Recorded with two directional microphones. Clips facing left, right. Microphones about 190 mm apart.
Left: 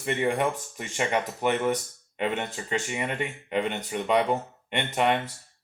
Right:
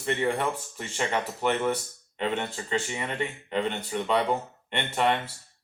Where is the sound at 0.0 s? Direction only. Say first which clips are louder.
Left 1 dB; 15° left (ahead or behind).